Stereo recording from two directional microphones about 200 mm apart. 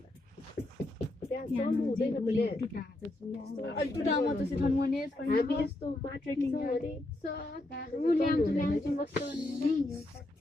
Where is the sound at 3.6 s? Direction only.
60° left (ahead or behind).